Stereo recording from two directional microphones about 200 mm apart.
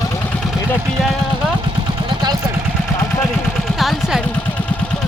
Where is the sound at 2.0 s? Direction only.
20° right (ahead or behind).